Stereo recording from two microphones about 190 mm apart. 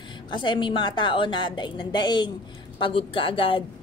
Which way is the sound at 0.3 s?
25° left (ahead or behind).